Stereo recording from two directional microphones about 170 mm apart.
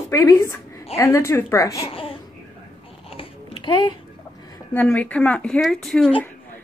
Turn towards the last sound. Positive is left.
turn(degrees=5)  # may be behind; listen again after turning